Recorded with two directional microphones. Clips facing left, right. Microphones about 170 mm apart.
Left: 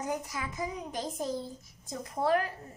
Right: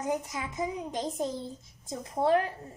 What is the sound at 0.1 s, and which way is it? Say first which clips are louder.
A child's voice: right 3 dB; 20° right (ahead or behind).